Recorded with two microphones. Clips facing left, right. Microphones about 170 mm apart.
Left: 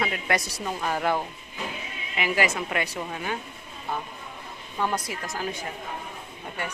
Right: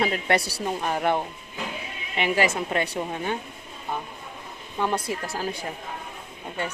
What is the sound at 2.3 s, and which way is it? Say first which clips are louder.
A woman's voice: right 2 dB; 30° right (ahead or behind).